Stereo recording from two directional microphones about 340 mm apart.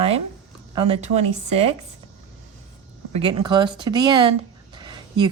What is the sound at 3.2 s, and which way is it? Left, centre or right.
Speech, centre.